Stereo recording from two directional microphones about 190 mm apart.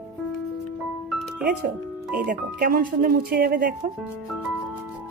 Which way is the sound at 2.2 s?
50° right (ahead or behind).